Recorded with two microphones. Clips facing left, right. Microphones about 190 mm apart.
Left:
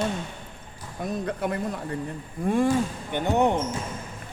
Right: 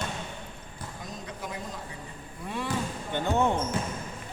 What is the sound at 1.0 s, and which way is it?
Speech, 60° left (ahead or behind).